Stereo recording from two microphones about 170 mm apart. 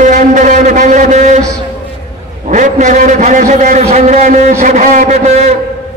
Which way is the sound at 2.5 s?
45° right (ahead or behind).